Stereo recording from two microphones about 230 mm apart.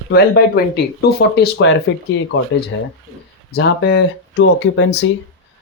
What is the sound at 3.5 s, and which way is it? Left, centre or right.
Speech, left.